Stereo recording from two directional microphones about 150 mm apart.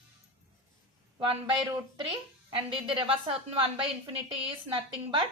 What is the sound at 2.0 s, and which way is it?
A woman's voice, 35° right (ahead or behind).